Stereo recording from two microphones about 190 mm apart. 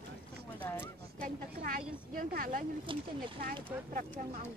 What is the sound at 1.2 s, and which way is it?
Speech, 50° right (ahead or behind).